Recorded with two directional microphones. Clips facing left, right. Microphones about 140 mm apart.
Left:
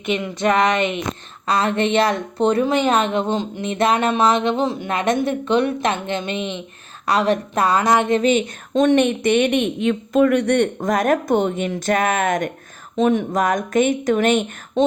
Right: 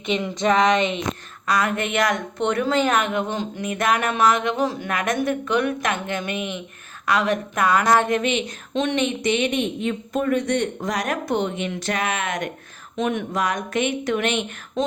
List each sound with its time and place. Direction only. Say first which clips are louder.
1.5 s speech: left 4 dB; 30° left (ahead or behind)
8.2 s a woman's voice: left 6 dB; 45° left (ahead or behind)
13.0 s speech: left 6 dB; 35° left (ahead or behind)
13.4 s a woman's voice: left 5 dB; 45° left (ahead or behind)